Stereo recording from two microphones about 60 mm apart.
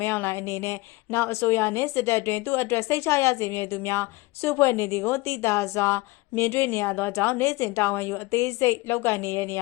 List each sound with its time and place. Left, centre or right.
0.0 s a woman's voice: left
8.3 s a woman's voice: left